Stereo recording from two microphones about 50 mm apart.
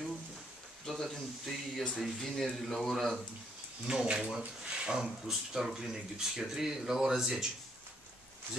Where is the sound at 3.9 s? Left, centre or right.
Centre.